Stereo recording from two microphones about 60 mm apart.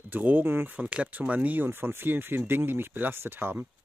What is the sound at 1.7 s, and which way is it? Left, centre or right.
Speech, right.